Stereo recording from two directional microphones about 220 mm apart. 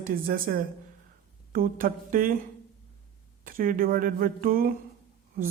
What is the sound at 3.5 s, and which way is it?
Speech, 40° right (ahead or behind).